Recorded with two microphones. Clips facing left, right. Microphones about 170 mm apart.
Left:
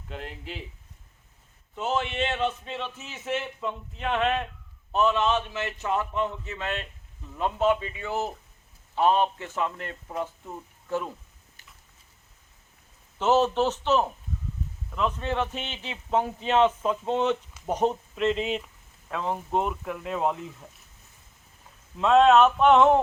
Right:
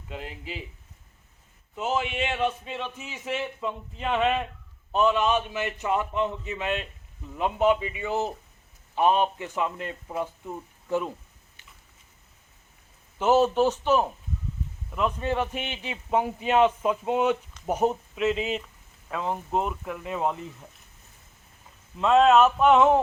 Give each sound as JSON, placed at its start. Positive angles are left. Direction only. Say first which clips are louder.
{"t": 0.1, "sound": "speech", "louder": "right 1 dB", "side_deg": -5}
{"t": 1.7, "sound": "speech", "louder": "even", "side_deg": -10}
{"t": 13.1, "sound": "speech", "louder": "right 2 dB", "side_deg": -10}
{"t": 21.9, "sound": "speech", "louder": "even", "side_deg": 0}